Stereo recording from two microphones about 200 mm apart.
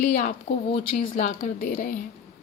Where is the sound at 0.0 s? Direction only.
40° left (ahead or behind).